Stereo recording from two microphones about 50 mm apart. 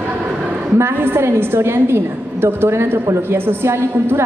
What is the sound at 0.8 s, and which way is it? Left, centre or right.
A woman's voice, right.